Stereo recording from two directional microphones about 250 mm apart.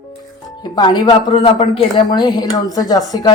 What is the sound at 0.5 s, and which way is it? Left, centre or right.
Speech, centre.